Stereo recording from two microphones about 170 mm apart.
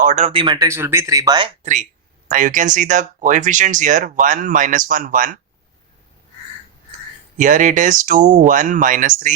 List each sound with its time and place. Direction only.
0.0 s speech: 45° right (ahead or behind)
0.3 s speech: 30° right (ahead or behind)
0.7 s speech: 15° right (ahead or behind)
1.6 s speech: 45° right (ahead or behind)
7.3 s speech: 50° right (ahead or behind)